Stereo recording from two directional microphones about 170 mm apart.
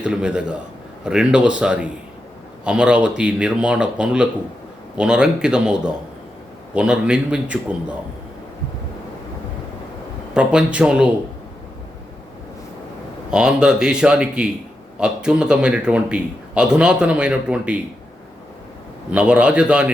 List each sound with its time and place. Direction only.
0.0 s a man's voice: 5° right (ahead or behind)
10.3 s a man's voice: 5° right (ahead or behind)
13.3 s a man's voice: 5° right (ahead or behind)
19.1 s a man's voice: 5° right (ahead or behind)